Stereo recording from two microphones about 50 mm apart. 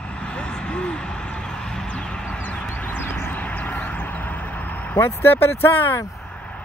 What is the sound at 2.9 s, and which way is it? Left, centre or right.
Vehicle, left.